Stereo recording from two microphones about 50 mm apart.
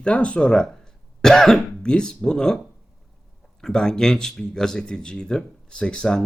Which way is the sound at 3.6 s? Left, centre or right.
Centre.